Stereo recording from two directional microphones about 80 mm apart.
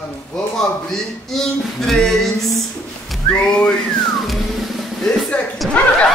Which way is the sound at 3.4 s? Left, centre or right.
Centre.